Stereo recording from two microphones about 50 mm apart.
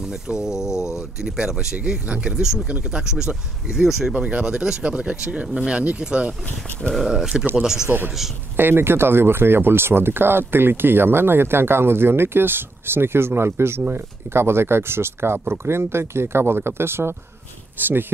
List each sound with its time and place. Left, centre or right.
0.0 s speech: centre
4.3 s speech: centre
6.8 s speech: centre
7.1 s speech: centre
8.5 s speech: right
17.7 s speech: right